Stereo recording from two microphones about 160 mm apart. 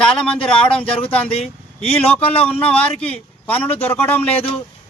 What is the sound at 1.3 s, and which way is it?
Speech, 40° left (ahead or behind).